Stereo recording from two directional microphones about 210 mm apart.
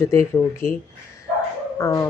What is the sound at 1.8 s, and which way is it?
Speech, 15° left (ahead or behind).